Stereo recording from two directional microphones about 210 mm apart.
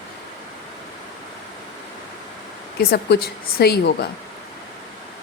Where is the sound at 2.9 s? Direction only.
50° left (ahead or behind).